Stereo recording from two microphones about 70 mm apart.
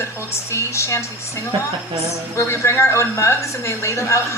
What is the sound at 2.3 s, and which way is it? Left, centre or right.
A woman's voice, left.